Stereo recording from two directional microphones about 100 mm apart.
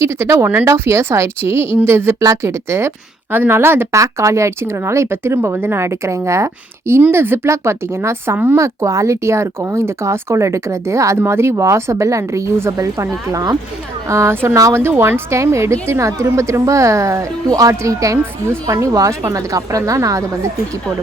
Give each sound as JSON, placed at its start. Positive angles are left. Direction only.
{"t": 0.0, "sound": "a woman's voice", "side_deg": -30}